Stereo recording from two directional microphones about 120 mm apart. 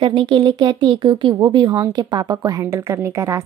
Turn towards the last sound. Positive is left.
turn(degrees=-25)  # may be behind; listen again after turning